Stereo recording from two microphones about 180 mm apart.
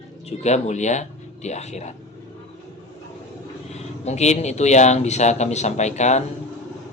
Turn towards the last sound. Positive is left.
turn(degrees=40)  # may be behind; listen again after turning